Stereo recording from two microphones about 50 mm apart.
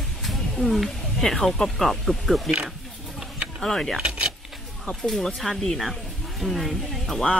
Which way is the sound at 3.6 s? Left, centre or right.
Centre.